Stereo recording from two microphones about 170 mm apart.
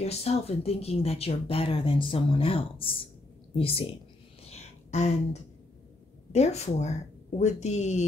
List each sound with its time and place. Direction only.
0.0 s speech: 40° left (ahead or behind)
4.5 s a sound: 40° left (ahead or behind)
6.3 s speech: 40° left (ahead or behind)